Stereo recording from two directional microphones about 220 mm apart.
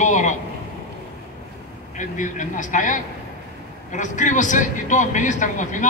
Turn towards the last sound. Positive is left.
turn(degrees=35)  # may be behind; listen again after turning